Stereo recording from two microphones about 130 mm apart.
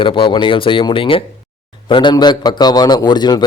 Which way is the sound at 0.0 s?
40° left (ahead or behind).